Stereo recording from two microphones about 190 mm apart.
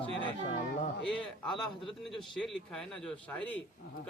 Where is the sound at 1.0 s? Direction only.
Centre (ahead or behind).